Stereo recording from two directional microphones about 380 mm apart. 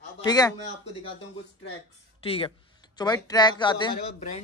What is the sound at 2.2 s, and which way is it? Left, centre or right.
Speech, centre.